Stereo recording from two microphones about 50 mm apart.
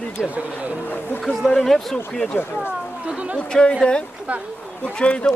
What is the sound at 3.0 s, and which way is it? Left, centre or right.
Speech, right.